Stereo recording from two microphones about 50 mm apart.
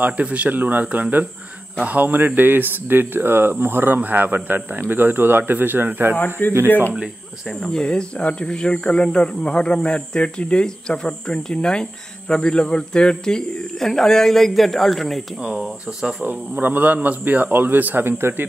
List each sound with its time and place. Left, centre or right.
0.2 s speech: right
6.1 s speech: left
7.7 s speech: centre
15.5 s speech: centre
16.2 s speech: right